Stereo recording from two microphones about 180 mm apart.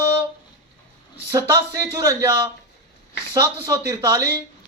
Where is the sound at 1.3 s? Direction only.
15° right (ahead or behind).